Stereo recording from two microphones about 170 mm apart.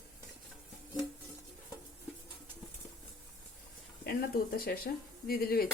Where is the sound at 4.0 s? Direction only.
60° left (ahead or behind).